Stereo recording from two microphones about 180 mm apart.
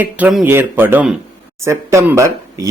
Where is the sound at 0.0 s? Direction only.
5° right (ahead or behind).